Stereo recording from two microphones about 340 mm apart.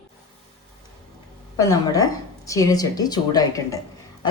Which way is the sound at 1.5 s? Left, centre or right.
Centre.